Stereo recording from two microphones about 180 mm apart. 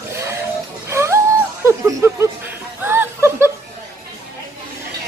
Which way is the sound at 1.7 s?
15° right (ahead or behind).